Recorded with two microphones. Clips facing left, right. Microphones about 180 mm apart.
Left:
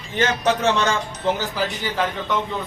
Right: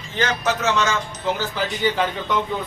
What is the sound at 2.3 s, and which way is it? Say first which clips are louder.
Speech: right 1 dB; centre (ahead or behind).